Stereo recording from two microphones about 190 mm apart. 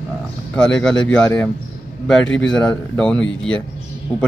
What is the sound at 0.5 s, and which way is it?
A man's voice, 5° left (ahead or behind).